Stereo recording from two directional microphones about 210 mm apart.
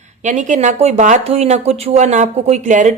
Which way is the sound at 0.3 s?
35° right (ahead or behind).